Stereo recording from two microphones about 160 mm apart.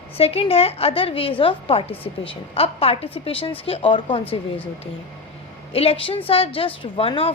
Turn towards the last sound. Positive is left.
turn(degrees=35)  # may be behind; listen again after turning